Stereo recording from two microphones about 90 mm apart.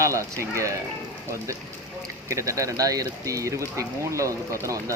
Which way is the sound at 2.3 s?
35° right (ahead or behind).